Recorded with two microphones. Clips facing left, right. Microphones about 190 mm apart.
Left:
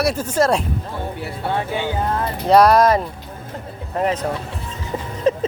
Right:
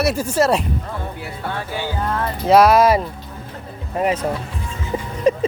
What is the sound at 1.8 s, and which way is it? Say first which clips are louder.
Speech: left 1 dB; 25° left (ahead or behind).